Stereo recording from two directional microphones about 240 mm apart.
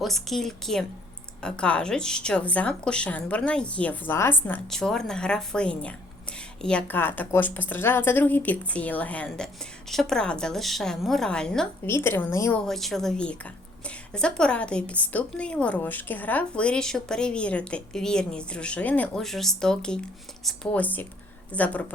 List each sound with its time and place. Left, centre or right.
0.0 s a woman's voice: centre